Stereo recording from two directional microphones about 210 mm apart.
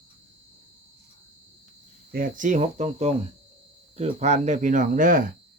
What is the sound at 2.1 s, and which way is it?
Speech, 40° right (ahead or behind).